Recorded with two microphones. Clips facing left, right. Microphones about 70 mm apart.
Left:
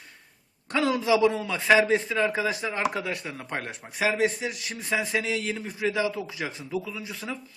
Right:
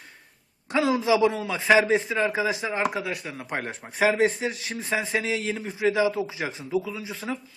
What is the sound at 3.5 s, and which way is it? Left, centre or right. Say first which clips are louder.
A man's voice: right 3 dB; right.